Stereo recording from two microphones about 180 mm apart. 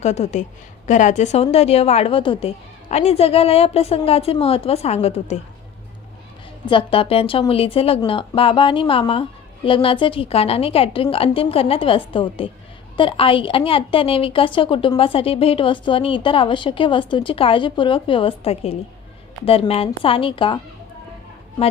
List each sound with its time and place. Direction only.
0.0 s a woman's voice: 40° left (ahead or behind)
6.7 s a woman's voice: 30° left (ahead or behind)